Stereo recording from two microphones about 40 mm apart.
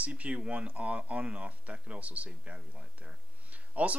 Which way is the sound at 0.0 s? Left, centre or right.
Right.